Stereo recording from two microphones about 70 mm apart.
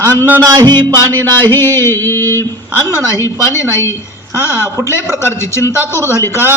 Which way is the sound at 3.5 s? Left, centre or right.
Left.